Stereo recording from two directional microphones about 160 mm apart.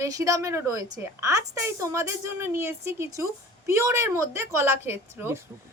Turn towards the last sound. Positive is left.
turn(degrees=-15)  # may be behind; listen again after turning